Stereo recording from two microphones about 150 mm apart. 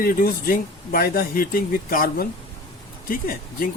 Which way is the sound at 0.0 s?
70° left (ahead or behind).